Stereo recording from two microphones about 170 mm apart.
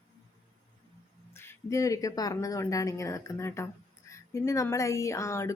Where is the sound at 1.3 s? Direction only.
15° left (ahead or behind).